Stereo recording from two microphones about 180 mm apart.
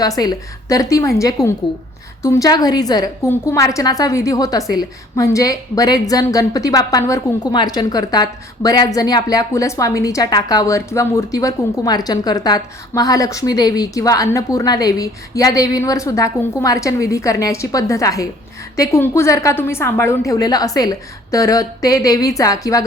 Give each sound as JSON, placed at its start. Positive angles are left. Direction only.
{"t": 0.2, "sound": "a woman's voice", "side_deg": 20}